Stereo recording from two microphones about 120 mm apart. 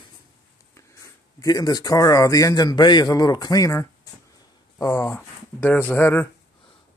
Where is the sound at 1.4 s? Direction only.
30° left (ahead or behind).